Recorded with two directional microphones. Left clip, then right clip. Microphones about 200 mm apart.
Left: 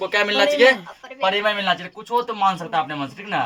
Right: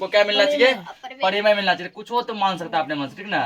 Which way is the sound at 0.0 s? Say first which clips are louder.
Right 1 dB; 40° left (ahead or behind).